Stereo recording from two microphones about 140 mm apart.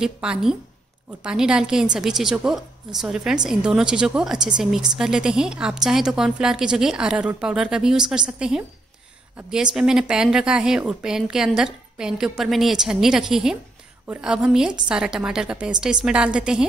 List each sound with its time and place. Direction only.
0.0 s a woman's voice: 5° right (ahead or behind)